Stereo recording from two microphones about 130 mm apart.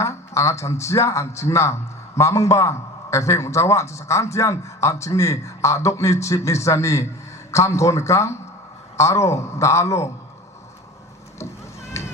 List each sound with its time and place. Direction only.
0.0 s a man's voice: 20° left (ahead or behind)
11.3 s vehicle: 20° left (ahead or behind)